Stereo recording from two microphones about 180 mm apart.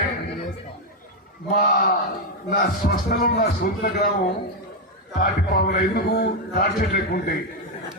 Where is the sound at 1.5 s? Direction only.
55° left (ahead or behind).